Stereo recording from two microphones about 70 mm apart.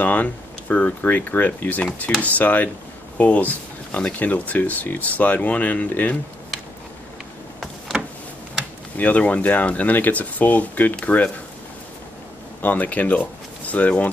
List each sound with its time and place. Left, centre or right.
0.0 s speech: left
8.9 s speech: left
12.6 s speech: left